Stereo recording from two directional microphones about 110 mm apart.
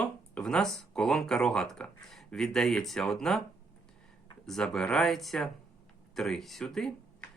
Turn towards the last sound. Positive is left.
turn(degrees=5)  # may be behind; listen again after turning